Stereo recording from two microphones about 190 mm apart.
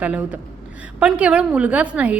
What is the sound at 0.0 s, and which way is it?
A woman's voice, 5° right (ahead or behind).